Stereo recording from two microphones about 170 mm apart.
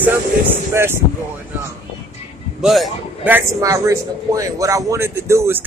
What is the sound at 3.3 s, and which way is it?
Speech, 15° right (ahead or behind).